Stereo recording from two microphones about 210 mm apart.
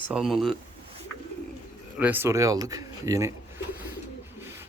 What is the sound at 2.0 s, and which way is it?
Speech, 10° right (ahead or behind).